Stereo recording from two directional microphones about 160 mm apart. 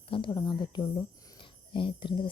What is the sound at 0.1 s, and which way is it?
Speech, 30° left (ahead or behind).